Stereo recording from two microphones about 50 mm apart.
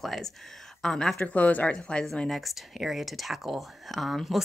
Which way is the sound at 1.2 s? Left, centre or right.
Left.